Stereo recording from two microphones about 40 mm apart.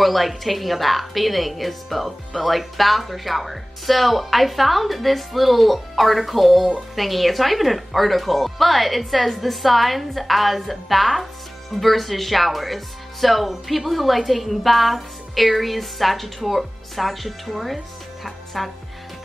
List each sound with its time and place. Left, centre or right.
0.0 s speech: centre
18.2 s music: centre